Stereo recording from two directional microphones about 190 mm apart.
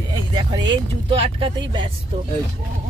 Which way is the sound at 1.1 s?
30° right (ahead or behind).